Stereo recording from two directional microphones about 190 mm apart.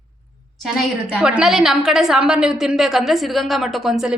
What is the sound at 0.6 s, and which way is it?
A woman's voice, 5° right (ahead or behind).